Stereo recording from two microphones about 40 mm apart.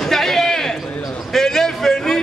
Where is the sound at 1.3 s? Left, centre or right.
Centre.